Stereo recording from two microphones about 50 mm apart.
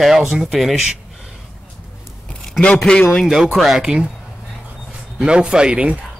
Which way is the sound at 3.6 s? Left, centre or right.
Centre.